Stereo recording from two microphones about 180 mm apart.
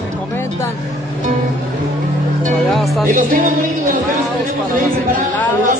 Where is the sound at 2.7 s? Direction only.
Centre (ahead or behind).